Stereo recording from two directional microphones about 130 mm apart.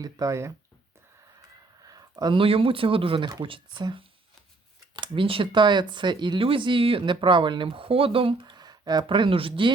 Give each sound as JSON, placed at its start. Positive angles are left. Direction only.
{"t": 0.0, "sound": "speech", "side_deg": -25}
{"t": 1.8, "sound": "a sound", "side_deg": -30}
{"t": 2.4, "sound": "speech", "side_deg": -45}